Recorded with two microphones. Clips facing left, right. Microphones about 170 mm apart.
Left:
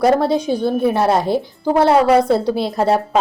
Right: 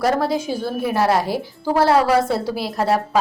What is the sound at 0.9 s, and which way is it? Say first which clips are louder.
Speech: left 3 dB; 25° left (ahead or behind).